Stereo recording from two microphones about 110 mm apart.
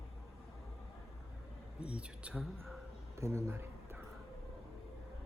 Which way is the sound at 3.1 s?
25° right (ahead or behind).